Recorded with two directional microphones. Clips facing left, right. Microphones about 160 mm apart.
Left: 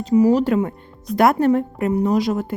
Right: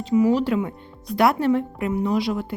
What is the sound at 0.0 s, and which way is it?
Speech, 40° left (ahead or behind).